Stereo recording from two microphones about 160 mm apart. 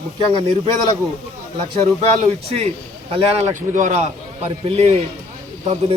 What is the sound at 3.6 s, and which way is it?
Speech, 55° right (ahead or behind).